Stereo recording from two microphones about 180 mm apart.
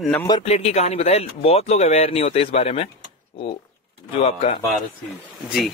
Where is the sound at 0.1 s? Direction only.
15° left (ahead or behind).